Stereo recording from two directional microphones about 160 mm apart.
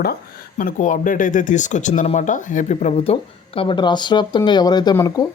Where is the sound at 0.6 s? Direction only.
55° left (ahead or behind).